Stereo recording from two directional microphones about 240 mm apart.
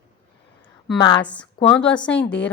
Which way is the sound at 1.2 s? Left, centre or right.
Centre.